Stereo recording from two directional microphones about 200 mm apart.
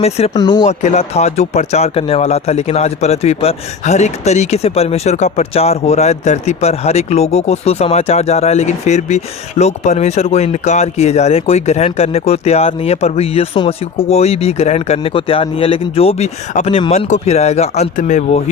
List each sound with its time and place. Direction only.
0.3 s speech: 20° left (ahead or behind)
0.7 s speech: 35° left (ahead or behind)